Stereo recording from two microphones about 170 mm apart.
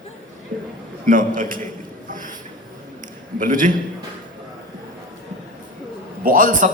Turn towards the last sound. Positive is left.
turn(degrees=-50)  # may be behind; listen again after turning